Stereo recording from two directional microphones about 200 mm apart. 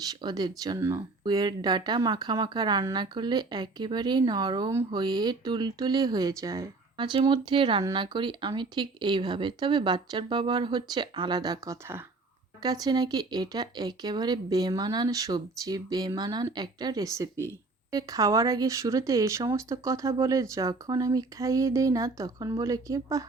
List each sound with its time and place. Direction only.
0.0 s speech: 20° right (ahead or behind)